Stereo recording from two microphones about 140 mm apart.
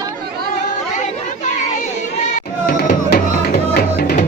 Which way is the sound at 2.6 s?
90° left.